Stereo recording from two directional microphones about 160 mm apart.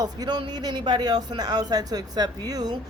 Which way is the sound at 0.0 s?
25° right (ahead or behind).